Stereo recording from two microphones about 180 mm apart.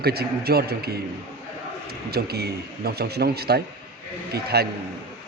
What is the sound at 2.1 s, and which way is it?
A man's voice, 60° right (ahead or behind).